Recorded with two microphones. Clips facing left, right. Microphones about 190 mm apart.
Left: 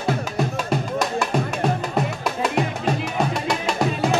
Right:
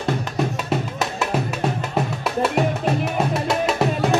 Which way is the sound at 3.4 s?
5° right (ahead or behind).